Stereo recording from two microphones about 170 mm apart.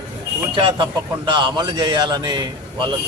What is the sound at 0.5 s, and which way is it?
Speech, 30° right (ahead or behind).